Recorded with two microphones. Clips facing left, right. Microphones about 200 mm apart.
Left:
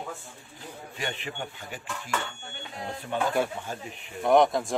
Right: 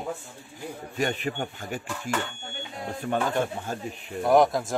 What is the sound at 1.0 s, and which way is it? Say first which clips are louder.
Speech: right 7 dB; 45° right (ahead or behind).